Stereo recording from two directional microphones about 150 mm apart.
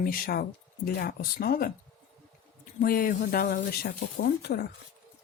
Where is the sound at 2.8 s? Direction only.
70° left (ahead or behind); by 4.7 s 90° left.